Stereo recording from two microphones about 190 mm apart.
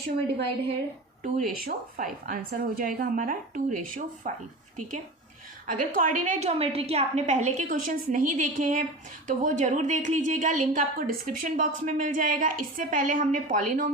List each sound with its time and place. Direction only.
1.2 s a woman's voice: 45° right (ahead or behind)
5.6 s a woman's voice: 45° right (ahead or behind)